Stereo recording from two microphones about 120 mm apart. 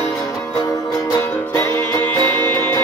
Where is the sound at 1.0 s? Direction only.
20° left (ahead or behind).